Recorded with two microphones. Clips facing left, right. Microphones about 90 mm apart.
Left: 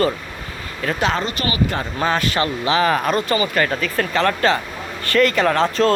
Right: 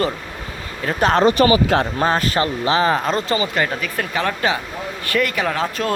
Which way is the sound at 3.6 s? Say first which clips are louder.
Left 2 dB; 10° right (ahead or behind).